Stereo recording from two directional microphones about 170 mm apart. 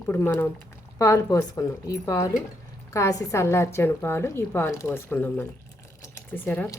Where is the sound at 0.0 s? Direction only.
10° left (ahead or behind).